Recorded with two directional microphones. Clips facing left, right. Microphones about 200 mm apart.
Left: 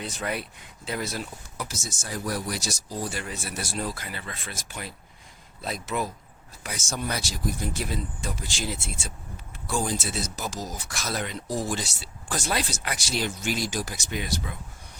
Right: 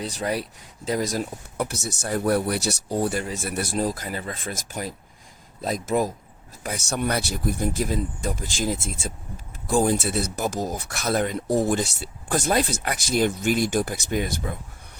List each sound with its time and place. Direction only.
0.0 s speech: 35° right (ahead or behind); by 3.8 s 55° right (ahead or behind)
3.8 s speech: 40° right (ahead or behind)
6.6 s speech: 55° right (ahead or behind)